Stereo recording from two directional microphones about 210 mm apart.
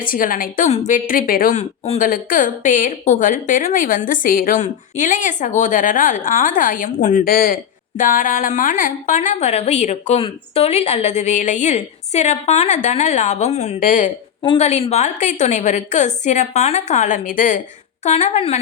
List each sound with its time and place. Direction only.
0.0 s a woman's voice: 40° left (ahead or behind)
14.4 s a woman's voice: 30° left (ahead or behind)